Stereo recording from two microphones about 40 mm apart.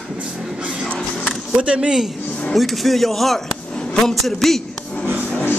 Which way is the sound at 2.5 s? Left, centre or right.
Centre.